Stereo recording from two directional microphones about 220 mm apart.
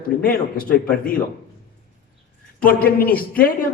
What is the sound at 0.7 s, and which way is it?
Speech, 40° left (ahead or behind).